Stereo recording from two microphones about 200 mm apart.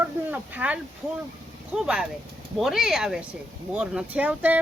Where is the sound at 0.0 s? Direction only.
10° right (ahead or behind).